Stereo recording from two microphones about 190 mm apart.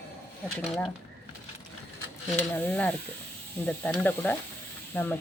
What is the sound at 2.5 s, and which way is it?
Speech, 10° left (ahead or behind).